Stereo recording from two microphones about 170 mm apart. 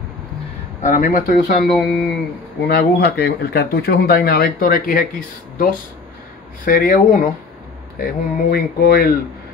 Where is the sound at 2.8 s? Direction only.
65° left (ahead or behind).